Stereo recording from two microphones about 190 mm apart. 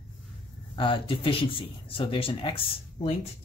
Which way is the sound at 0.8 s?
25° left (ahead or behind).